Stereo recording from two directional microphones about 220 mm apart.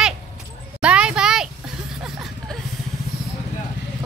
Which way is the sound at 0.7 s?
5° right (ahead or behind).